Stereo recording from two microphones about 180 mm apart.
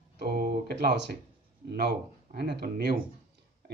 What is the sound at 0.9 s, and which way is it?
Speech, 70° right (ahead or behind).